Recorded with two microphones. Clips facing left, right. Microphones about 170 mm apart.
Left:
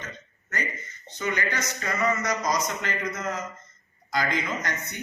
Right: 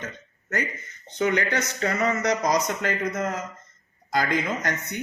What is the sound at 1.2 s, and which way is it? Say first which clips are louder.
Speech: right 5 dB; 65° right (ahead or behind).